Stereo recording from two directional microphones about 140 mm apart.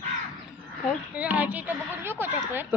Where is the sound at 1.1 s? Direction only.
10° right (ahead or behind).